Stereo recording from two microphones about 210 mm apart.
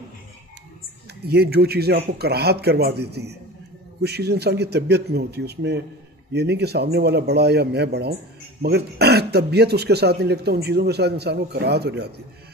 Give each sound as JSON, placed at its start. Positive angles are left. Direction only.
{"t": 1.2, "sound": "speech", "side_deg": -50}